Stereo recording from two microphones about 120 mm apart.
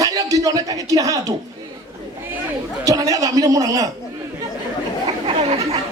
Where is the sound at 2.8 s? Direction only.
30° right (ahead or behind).